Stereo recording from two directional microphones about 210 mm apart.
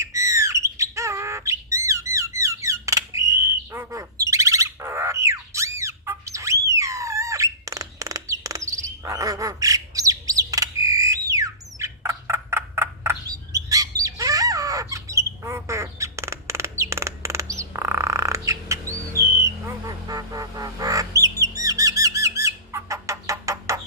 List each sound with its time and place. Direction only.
0.0 s squawk: 15° right (ahead or behind)
2.6 s bird: 15° right (ahead or behind)
19.4 s duck: 15° right (ahead or behind)